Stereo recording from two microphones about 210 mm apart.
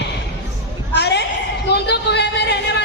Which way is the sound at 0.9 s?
55° left (ahead or behind).